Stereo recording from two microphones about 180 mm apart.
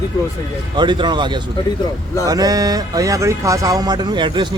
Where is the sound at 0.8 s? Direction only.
25° right (ahead or behind).